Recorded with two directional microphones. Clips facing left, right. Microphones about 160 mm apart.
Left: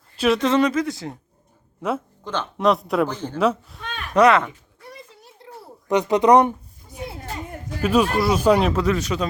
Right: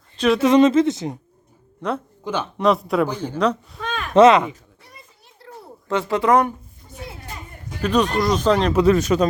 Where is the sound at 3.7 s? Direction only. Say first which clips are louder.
Right 6 dB; 90° right.